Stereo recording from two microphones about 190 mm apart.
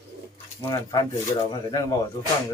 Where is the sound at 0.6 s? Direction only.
15° left (ahead or behind).